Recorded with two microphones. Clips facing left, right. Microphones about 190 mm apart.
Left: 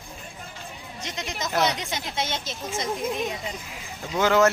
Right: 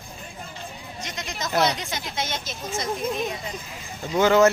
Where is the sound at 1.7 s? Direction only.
20° left (ahead or behind).